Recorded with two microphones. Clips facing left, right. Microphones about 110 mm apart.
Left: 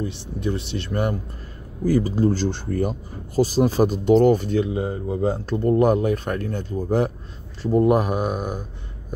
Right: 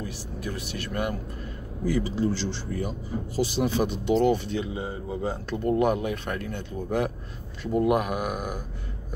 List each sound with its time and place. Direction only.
0.0 s speech: 25° left (ahead or behind)
1.9 s speech: 45° left (ahead or behind); by 8.6 s 20° left (ahead or behind)